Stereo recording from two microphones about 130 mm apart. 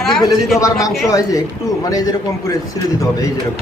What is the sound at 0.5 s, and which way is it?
A man's voice, 25° left (ahead or behind).